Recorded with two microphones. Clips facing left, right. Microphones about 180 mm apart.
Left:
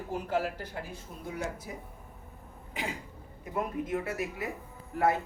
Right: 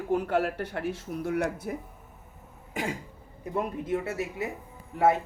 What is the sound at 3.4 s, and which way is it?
A woman's voice, 30° right (ahead or behind).